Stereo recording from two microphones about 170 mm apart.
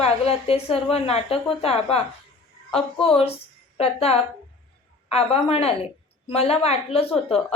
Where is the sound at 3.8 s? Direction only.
35° left (ahead or behind).